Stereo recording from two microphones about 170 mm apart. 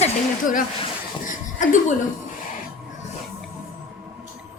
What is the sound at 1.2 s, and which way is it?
Laughter, 50° left (ahead or behind).